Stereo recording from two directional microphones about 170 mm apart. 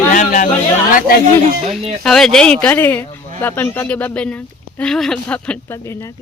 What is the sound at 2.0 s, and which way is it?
Speech, 5° left (ahead or behind).